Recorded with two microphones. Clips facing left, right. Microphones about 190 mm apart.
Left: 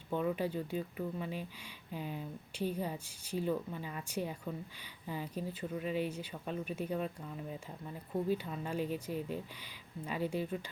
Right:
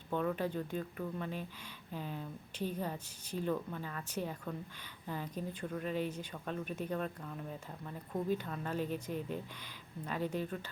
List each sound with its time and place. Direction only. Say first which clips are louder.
0.1 s a woman's voice: left 1 dB; 10° left (ahead or behind)
8.3 s a woman's voice: left 1 dB; 10° left (ahead or behind)